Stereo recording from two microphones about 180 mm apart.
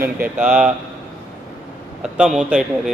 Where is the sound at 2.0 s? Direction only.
5° right (ahead or behind).